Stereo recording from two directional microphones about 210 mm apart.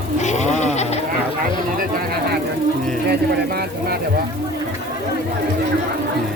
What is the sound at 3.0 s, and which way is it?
Speech, 50° right (ahead or behind).